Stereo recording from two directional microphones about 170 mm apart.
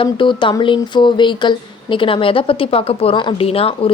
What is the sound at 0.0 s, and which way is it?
Speech, 30° left (ahead or behind).